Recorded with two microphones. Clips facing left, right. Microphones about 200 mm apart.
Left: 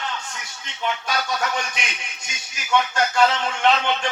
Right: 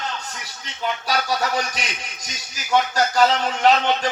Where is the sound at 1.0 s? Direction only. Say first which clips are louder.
Right 5 dB; 35° right (ahead or behind).